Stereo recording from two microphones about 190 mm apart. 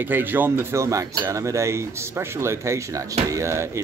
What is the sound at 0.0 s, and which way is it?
Speech, 10° right (ahead or behind).